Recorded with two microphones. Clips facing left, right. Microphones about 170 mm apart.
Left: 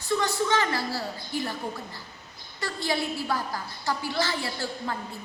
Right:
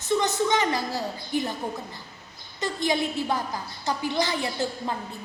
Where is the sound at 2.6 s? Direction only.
20° right (ahead or behind).